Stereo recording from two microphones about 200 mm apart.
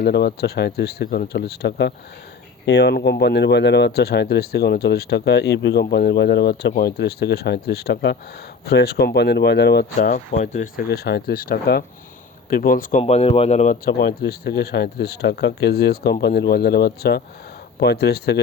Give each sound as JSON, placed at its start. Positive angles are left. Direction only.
{"t": 0.0, "sound": "speech", "side_deg": 55}
{"t": 10.1, "sound": "speech", "side_deg": 35}
{"t": 13.0, "sound": "speech", "side_deg": 30}